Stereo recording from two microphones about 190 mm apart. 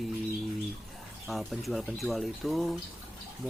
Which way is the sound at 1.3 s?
Centre (ahead or behind).